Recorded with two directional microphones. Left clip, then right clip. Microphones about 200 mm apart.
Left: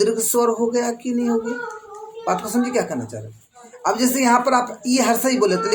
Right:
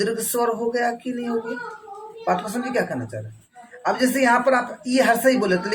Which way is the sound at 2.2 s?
25° left (ahead or behind).